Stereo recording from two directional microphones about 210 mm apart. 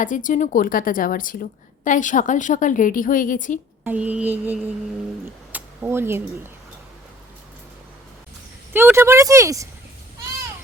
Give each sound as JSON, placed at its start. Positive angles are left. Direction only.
{"t": 0.0, "sound": "a woman's voice", "side_deg": 40}
{"t": 3.8, "sound": "speech", "side_deg": -5}
{"t": 8.7, "sound": "speech", "side_deg": -10}